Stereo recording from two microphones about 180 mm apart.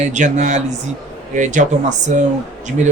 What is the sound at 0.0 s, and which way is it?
Speech, 40° right (ahead or behind).